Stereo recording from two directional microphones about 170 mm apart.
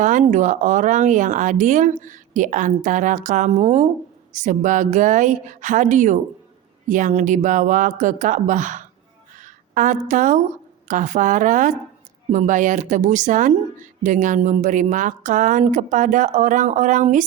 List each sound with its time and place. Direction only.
0.0 s a woman's voice: 45° right (ahead or behind)